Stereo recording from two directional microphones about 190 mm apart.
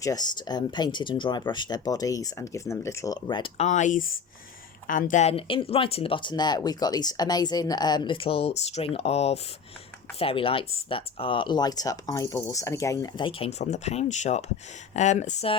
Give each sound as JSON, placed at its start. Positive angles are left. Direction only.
{"t": 0.0, "sound": "speech", "side_deg": 20}